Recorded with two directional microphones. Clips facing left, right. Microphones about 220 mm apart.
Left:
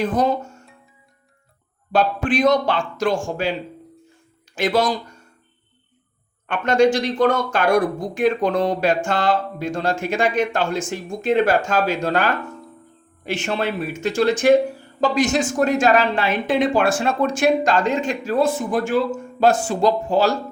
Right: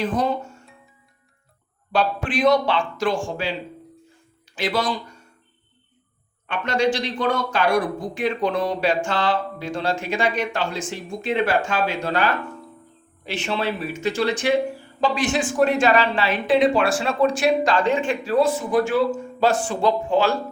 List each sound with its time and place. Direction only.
0.0 s speech: 45° left (ahead or behind)
1.9 s speech: 45° left (ahead or behind)
4.5 s speech: 45° left (ahead or behind)
6.5 s speech: 50° left (ahead or behind)